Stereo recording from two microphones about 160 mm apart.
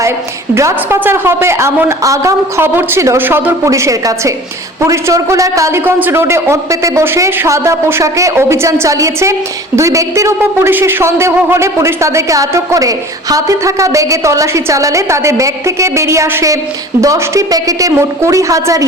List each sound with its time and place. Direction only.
0.5 s a man's voice: 15° right (ahead or behind)